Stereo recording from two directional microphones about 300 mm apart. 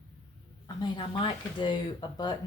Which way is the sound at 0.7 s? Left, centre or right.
Centre.